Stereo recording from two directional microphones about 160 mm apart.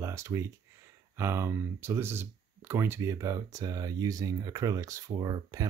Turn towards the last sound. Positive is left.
turn(degrees=-25)  # may be behind; listen again after turning